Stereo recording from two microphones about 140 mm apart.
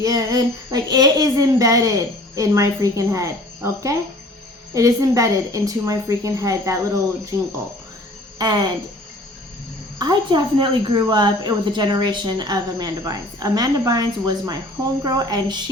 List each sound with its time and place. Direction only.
0.0 s a woman's voice: 25° right (ahead or behind)
8.4 s speech: 30° right (ahead or behind)
10.0 s a woman's voice: 30° right (ahead or behind)